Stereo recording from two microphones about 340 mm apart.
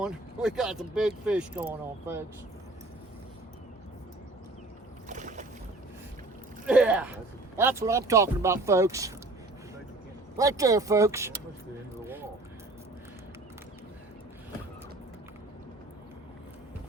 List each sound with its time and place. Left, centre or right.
0.0 s speech: centre
5.0 s boat: right
6.7 s speech: centre
10.3 s speech: centre
12.0 s a sound: centre